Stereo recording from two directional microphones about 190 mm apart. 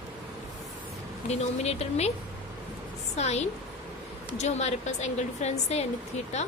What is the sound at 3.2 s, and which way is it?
A woman's voice, 35° left (ahead or behind).